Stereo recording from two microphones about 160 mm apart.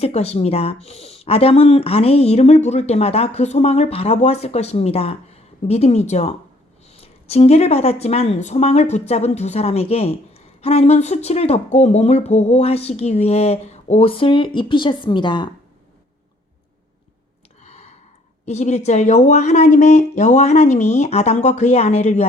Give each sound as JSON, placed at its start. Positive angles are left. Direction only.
{"t": 0.0, "sound": "speech", "side_deg": 40}
{"t": 17.6, "sound": "a sound", "side_deg": 40}
{"t": 18.4, "sound": "speech", "side_deg": 45}